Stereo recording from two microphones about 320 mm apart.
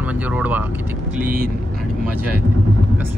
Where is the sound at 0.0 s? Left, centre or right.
Centre.